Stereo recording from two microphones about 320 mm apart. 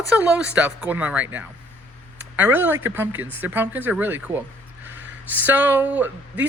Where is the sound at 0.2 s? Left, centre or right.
Centre.